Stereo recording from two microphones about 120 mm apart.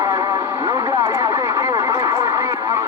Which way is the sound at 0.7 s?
25° right (ahead or behind).